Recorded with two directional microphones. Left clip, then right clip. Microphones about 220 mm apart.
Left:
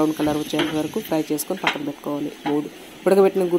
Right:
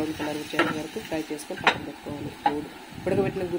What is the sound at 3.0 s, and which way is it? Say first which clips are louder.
Speech: left 10 dB; 40° left (ahead or behind).